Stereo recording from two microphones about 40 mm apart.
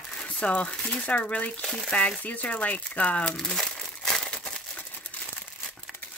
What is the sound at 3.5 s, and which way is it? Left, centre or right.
Crumpling, centre.